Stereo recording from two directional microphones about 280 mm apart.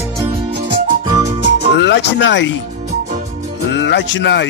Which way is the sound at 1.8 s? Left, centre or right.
Left.